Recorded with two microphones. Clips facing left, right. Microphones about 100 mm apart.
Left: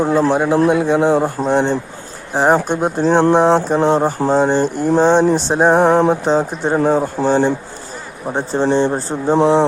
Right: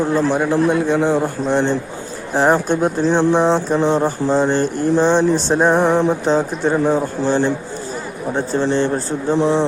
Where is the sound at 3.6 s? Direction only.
15° left (ahead or behind).